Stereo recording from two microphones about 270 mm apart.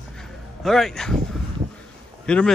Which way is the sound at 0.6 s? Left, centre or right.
Centre.